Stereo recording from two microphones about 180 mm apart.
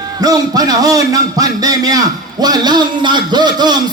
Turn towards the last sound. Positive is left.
turn(degrees=-25)  # may be behind; listen again after turning